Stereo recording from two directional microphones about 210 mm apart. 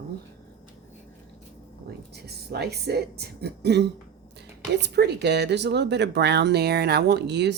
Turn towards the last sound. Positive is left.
turn(degrees=-55)  # may be behind; listen again after turning